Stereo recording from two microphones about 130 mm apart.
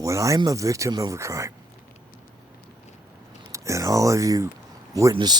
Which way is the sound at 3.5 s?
25° right (ahead or behind).